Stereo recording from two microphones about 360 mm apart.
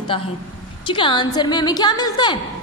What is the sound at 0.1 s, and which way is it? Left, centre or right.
A woman's voice, centre.